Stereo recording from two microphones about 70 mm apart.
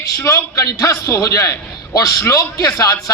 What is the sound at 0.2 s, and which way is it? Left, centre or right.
A man's voice, left.